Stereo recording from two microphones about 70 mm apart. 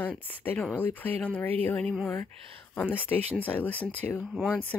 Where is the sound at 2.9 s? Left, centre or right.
Left.